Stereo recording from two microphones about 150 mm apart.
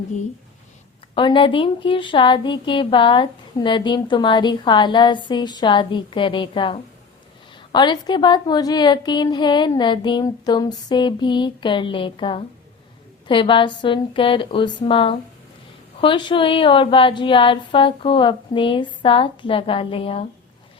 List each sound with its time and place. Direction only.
1.1 s a woman's voice: 35° left (ahead or behind)